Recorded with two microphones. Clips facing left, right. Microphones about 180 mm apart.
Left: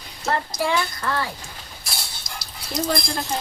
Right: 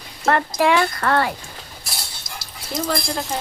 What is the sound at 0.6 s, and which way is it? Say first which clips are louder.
Speech: right 6 dB; 75° right (ahead or behind).